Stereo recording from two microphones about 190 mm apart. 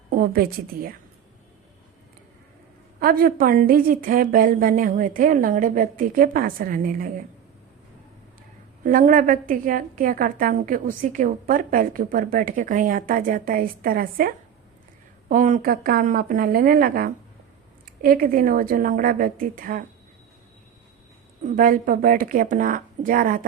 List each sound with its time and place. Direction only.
0.1 s a woman's voice: 50° right (ahead or behind)
3.0 s a woman's voice: 50° right (ahead or behind)
8.8 s a woman's voice: 45° right (ahead or behind)
21.4 s a woman's voice: 45° right (ahead or behind)